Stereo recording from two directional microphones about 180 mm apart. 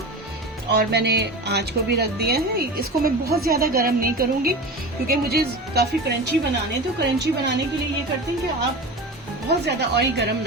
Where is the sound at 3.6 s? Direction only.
55° right (ahead or behind).